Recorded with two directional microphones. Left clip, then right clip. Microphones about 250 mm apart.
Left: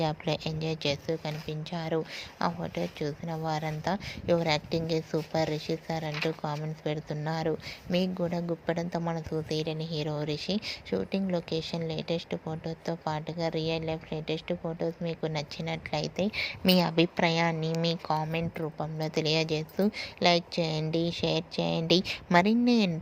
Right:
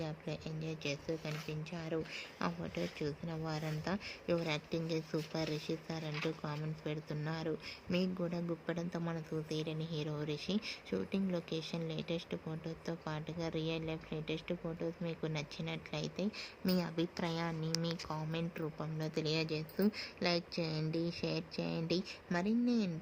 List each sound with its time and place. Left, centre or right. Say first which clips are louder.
0.0 s speech: left 13 dB; left
11.4 s speech: left 9 dB; left
11.7 s speech: left 8 dB; centre